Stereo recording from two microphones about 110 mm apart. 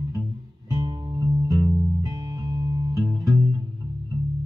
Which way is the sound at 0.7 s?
30° right (ahead or behind).